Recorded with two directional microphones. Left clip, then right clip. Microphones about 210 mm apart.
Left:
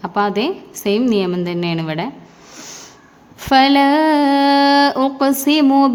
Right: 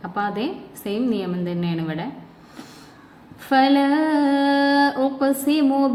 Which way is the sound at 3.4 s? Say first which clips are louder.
Left 6 dB; 50° left (ahead or behind).